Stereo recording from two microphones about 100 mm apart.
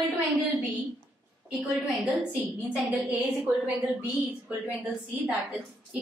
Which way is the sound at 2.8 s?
15° right (ahead or behind).